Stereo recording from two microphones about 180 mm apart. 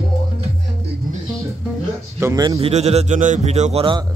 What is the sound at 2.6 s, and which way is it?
A man's voice, 35° right (ahead or behind).